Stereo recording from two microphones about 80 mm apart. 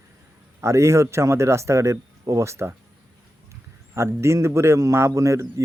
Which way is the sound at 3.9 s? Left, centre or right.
Right.